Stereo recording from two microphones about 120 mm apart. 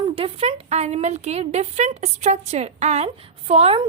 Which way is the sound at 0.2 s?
55° right (ahead or behind).